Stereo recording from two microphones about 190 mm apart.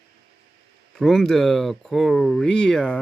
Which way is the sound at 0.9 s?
Centre (ahead or behind).